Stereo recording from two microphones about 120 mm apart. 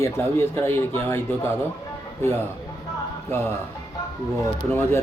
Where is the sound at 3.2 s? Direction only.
20° left (ahead or behind).